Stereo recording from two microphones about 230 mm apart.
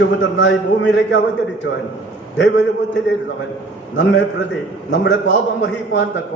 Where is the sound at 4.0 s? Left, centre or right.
Left.